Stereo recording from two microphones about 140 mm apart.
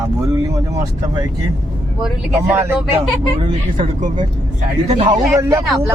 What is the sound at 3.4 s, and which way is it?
Speech, 40° right (ahead or behind).